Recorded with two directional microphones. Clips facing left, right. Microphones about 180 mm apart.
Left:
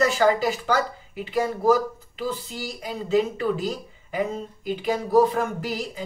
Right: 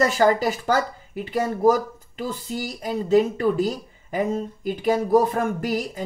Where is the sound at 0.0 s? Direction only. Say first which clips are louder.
Right 1 dB; 45° right (ahead or behind).